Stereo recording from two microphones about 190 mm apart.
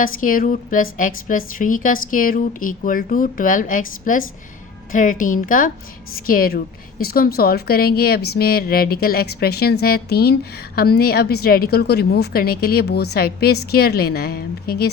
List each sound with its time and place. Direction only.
0.0 s a woman's voice: 45° left (ahead or behind)